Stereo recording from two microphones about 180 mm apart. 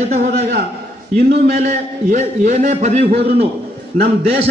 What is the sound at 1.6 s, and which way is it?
A man's voice, 45° right (ahead or behind).